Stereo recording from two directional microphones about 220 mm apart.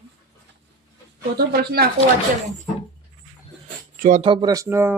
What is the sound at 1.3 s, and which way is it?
Speech, 45° right (ahead or behind).